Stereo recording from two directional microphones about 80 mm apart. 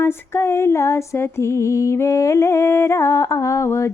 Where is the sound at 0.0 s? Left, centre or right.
Left.